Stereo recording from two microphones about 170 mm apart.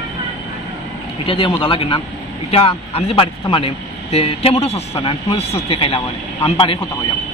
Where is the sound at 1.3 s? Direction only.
30° left (ahead or behind).